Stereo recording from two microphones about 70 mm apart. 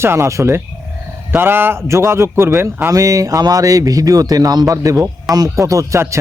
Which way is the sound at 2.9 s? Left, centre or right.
Right.